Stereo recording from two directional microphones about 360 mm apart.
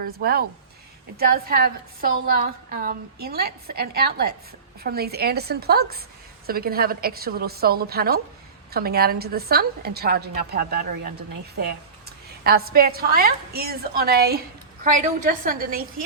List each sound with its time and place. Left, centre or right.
0.0 s a woman's voice: right